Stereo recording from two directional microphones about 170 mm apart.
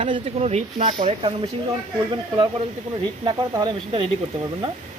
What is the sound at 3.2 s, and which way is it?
Speech, 25° right (ahead or behind).